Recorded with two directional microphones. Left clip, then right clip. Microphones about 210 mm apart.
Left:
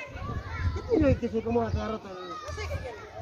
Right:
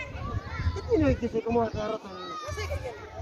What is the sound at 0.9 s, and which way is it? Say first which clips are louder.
A child's voice: even; 50° right (ahead or behind).